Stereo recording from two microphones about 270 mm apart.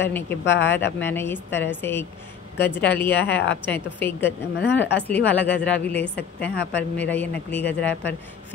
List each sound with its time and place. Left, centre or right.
0.0 s a woman's voice: centre
0.5 s speech: left
0.9 s a woman's voice: centre
4.6 s speech: left
5.0 s a woman's voice: centre
7.9 s speech: left